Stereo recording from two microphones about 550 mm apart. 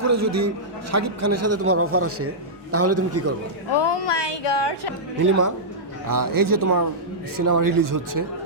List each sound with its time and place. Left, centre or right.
0.0 s a man's voice: right
3.7 s a woman's voice: left
5.2 s speech: right